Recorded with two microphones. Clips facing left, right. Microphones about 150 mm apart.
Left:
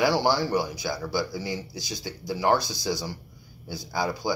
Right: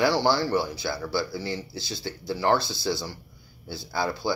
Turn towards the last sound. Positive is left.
turn(degrees=15)  # may be behind; listen again after turning